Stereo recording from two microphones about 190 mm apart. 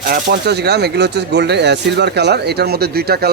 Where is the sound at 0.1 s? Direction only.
60° right (ahead or behind).